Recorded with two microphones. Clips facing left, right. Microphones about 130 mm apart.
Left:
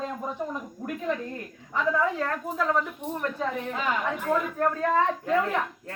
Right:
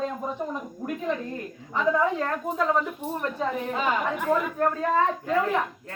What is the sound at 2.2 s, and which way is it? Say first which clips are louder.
A woman's voice: right 2 dB; 5° right (ahead or behind).